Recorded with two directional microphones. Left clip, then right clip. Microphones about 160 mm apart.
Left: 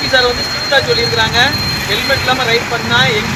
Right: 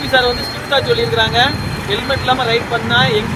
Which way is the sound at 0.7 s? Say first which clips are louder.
Left 2 dB; 55° right (ahead or behind).